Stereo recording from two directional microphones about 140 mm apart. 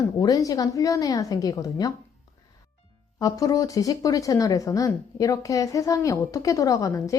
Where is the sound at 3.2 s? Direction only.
25° left (ahead or behind).